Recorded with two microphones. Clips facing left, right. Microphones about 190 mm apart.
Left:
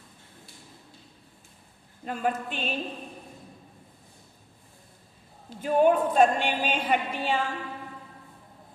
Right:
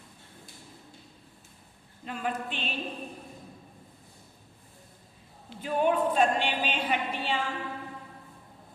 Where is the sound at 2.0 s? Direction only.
45° left (ahead or behind).